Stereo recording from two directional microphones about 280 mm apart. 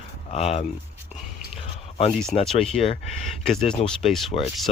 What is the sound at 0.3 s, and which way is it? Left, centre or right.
Speech, left.